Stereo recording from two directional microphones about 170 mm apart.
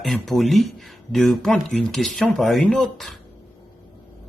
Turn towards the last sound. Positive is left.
turn(degrees=0)  # may be behind; listen again after turning